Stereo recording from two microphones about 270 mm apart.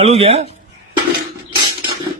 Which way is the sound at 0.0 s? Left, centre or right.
Right.